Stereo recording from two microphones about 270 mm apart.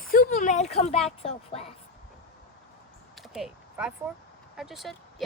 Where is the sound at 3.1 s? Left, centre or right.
Centre.